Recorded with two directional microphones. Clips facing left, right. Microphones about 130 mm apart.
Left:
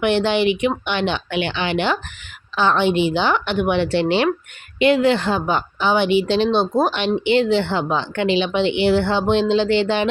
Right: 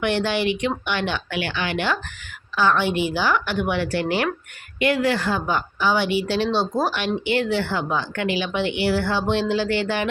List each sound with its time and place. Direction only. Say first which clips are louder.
0.0 s speech: left 5 dB; 20° left (ahead or behind)